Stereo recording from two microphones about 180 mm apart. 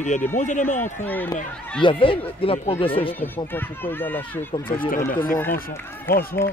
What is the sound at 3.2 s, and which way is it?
Speech, 10° left (ahead or behind).